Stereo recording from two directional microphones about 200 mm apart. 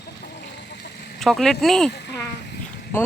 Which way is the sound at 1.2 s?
Centre (ahead or behind).